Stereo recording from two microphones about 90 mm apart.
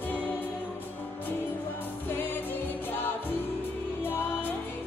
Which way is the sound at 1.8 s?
20° left (ahead or behind).